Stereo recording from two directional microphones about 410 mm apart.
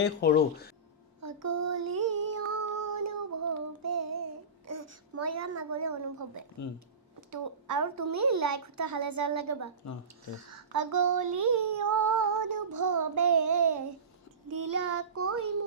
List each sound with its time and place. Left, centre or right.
0.0 s speech: left
1.2 s child singing: right
4.6 s a child's voice: right
7.2 s female singing: right
14.8 s child singing: right